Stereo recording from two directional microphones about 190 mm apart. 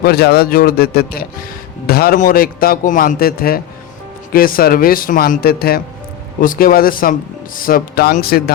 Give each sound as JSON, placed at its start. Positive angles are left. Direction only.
{"t": 0.0, "sound": "speech", "side_deg": 55}